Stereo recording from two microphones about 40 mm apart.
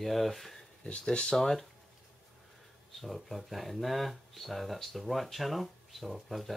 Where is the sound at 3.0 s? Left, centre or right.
Centre.